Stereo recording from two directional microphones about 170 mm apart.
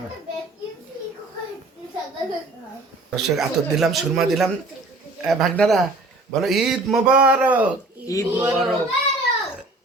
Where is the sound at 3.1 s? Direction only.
Centre (ahead or behind).